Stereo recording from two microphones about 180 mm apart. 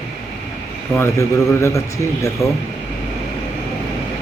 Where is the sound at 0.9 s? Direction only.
15° left (ahead or behind).